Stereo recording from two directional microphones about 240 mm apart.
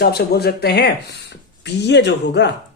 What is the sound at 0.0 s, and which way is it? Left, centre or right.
Speech, left.